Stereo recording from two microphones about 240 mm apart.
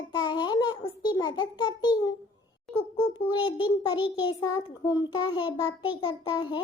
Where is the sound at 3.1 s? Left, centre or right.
Centre.